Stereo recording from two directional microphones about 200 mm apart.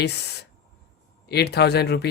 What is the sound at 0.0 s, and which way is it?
Speech, 55° left (ahead or behind).